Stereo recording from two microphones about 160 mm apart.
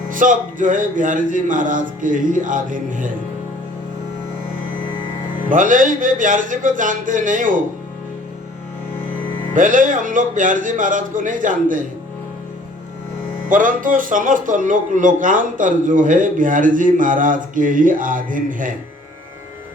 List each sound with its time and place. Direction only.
0.1 s a man's voice: 55° right (ahead or behind)
5.5 s a man's voice: 55° right (ahead or behind)
9.6 s a man's voice: 55° right (ahead or behind)
13.5 s a man's voice: 55° right (ahead or behind)